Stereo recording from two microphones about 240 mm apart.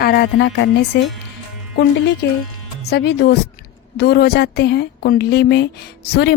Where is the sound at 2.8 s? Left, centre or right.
Left.